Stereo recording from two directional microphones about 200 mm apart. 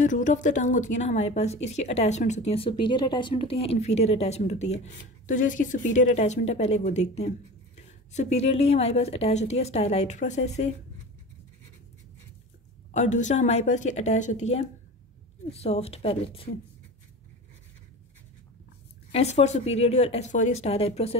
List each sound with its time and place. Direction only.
0.0 s a woman's voice: 40° left (ahead or behind)
12.9 s a woman's voice: 35° left (ahead or behind)
19.1 s a woman's voice: 35° left (ahead or behind)